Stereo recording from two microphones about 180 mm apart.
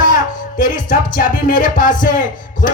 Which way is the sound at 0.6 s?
50° left (ahead or behind).